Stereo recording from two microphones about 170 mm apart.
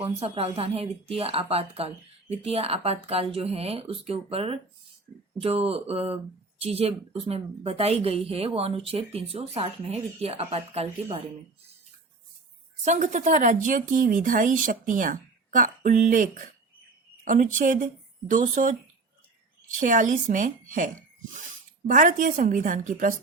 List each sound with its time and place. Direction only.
0.0 s a woman's voice: 35° right (ahead or behind)
12.8 s speech: 45° right (ahead or behind)
19.8 s speech: 50° right (ahead or behind)